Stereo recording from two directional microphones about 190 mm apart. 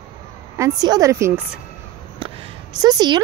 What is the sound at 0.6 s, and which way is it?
A woman's voice, 20° right (ahead or behind).